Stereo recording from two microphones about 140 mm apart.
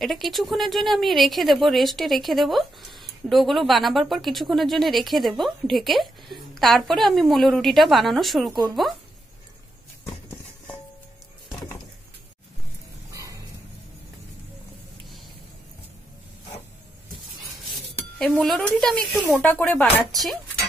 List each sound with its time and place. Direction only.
0.0 s speech: centre (ahead or behind)
13.1 s dog: 25° right (ahead or behind)
18.2 s speech: 5° left (ahead or behind)